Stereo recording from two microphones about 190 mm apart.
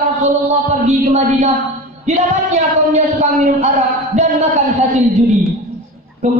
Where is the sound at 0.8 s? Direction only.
35° right (ahead or behind).